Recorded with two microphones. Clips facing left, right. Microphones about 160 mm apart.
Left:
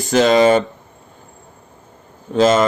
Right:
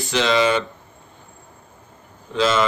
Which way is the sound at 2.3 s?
45° left (ahead or behind).